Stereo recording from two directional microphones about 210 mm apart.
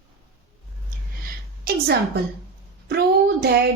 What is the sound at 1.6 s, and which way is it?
A woman's voice, 45° right (ahead or behind).